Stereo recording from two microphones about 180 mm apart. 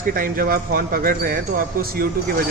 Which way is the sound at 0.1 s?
50° right (ahead or behind).